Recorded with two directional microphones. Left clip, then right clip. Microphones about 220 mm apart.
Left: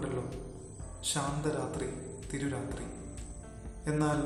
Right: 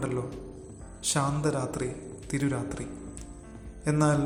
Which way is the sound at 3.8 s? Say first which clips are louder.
Right 5 dB; 30° right (ahead or behind).